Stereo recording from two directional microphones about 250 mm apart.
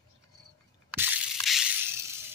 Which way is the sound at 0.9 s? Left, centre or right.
Centre.